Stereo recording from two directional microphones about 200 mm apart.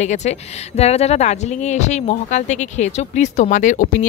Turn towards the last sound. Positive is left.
turn(degrees=40)  # may be behind; listen again after turning